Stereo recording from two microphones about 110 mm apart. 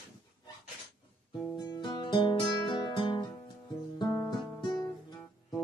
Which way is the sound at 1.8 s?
45° left (ahead or behind).